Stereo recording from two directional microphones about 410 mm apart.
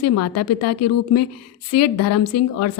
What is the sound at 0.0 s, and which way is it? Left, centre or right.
A woman's voice, left.